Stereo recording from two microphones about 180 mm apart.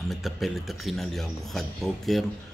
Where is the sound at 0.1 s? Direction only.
Centre (ahead or behind).